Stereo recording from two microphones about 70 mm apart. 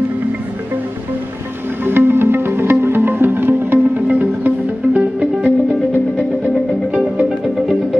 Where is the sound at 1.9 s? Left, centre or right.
Right.